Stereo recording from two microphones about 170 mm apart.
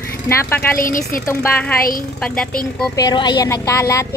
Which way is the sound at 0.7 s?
55° left (ahead or behind).